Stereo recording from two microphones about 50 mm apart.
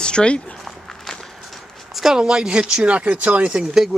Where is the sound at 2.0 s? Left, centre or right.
Centre; by 3.6 s right.